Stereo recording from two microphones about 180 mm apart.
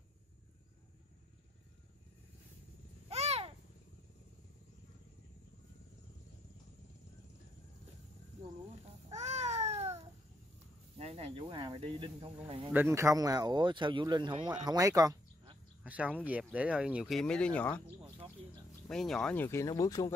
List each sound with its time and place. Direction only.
3.1 s babbling: 35° right (ahead or behind)
9.1 s babbling: 40° right (ahead or behind)
11.0 s snake: 35° right (ahead or behind)
12.7 s speech: 15° right (ahead or behind)
15.8 s speech: 10° right (ahead or behind)
18.9 s speech: centre (ahead or behind); by 20.1 s 20° left (ahead or behind)